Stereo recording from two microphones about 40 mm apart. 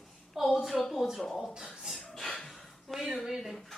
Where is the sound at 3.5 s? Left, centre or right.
Centre.